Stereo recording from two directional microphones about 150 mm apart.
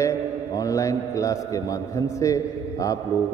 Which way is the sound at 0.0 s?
20° left (ahead or behind).